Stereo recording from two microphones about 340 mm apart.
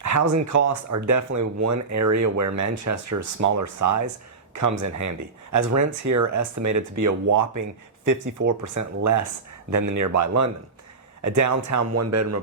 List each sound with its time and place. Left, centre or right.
0.0 s speech: right